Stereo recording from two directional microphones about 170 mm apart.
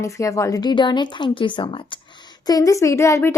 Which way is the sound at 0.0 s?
20° left (ahead or behind).